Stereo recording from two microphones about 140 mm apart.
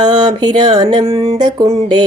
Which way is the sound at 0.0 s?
30° right (ahead or behind).